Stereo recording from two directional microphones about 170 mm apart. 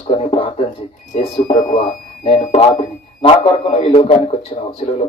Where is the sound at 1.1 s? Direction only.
50° left (ahead or behind).